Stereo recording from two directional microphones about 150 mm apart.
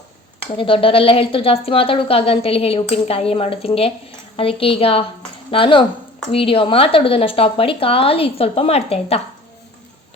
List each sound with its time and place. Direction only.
0.5 s speech: 35° left (ahead or behind)